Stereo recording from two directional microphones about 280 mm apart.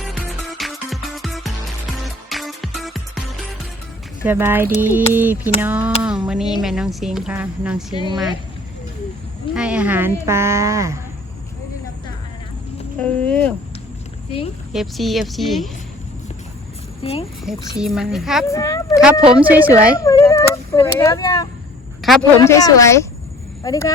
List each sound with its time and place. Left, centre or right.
0.0 s music: centre
4.2 s a sound: centre
6.0 s speech: centre
9.6 s speech: centre
10.2 s a sound: centre
13.0 s speech: centre
14.7 s speech: centre
17.0 s speech: centre
17.7 s speech: centre
18.4 s speech: centre
19.3 s speech: centre
20.1 s speech: centre
22.0 s speech: centre
22.4 s speech: centre